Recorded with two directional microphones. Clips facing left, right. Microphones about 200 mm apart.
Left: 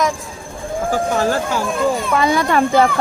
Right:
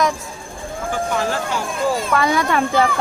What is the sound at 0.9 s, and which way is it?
Speech, 40° left (ahead or behind).